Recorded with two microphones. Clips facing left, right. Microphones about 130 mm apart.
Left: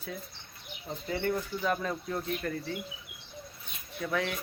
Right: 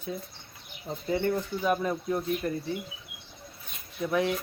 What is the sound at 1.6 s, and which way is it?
Speech, 15° right (ahead or behind).